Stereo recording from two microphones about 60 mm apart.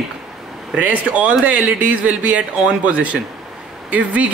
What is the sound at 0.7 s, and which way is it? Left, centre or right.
A man's voice, right.